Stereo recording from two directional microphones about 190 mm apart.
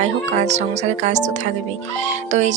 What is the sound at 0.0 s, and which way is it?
Speech, 40° right (ahead or behind).